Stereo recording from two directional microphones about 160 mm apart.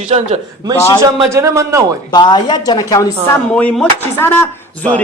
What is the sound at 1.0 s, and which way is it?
Speech, 20° right (ahead or behind).